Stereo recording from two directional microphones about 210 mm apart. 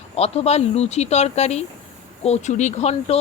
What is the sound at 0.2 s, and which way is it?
A woman's voice, 30° left (ahead or behind).